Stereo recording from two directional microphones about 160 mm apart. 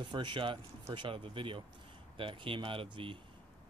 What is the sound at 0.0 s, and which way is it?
Speech, 30° right (ahead or behind).